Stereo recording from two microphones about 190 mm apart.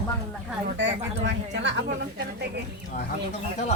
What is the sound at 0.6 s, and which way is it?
Speech, 70° right (ahead or behind).